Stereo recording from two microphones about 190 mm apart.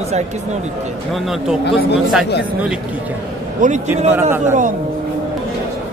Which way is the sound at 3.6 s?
45° right (ahead or behind).